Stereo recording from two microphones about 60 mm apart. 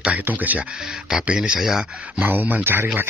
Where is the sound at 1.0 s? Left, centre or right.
Centre.